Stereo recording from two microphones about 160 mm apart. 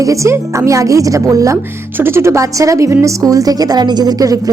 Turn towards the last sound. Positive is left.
turn(degrees=-20)  # may be behind; listen again after turning